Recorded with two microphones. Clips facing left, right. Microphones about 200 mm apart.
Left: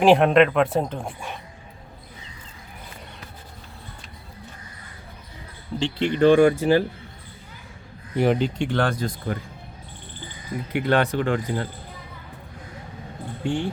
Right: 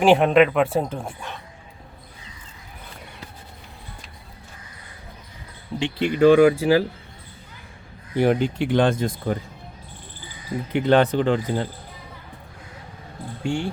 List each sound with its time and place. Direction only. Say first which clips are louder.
0.0 s speech: even; centre (ahead or behind)
5.8 s speech: right 2 dB; 10° right (ahead or behind)
8.2 s speech: right 1 dB; centre (ahead or behind)
8.7 s speech: right 4 dB; 20° right (ahead or behind)
10.7 s speech: right 4 dB; 20° right (ahead or behind)
13.4 s speech: even; 20° left (ahead or behind)